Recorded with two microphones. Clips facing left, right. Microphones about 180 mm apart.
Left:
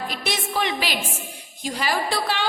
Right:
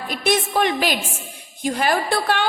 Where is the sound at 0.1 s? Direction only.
50° right (ahead or behind).